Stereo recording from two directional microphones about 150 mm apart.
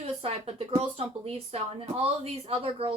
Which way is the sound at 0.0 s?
40° right (ahead or behind).